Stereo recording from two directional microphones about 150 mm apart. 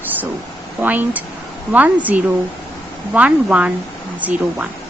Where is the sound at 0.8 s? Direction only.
10° right (ahead or behind).